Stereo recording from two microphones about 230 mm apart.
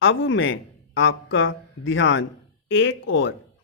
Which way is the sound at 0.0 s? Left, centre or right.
Left.